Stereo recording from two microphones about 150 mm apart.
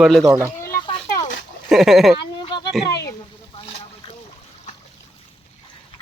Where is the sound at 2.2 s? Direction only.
30° left (ahead or behind).